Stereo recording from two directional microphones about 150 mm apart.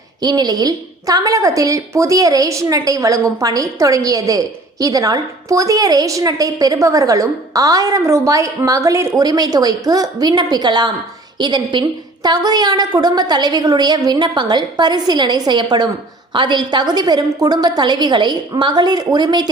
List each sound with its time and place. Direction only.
0.2 s a woman's voice: 25° right (ahead or behind)